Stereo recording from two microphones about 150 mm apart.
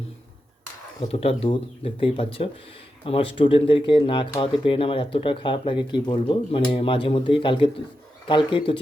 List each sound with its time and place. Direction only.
1.0 s speech: 40° left (ahead or behind)